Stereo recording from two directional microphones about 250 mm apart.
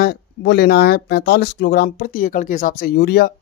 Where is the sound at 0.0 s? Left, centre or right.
Left.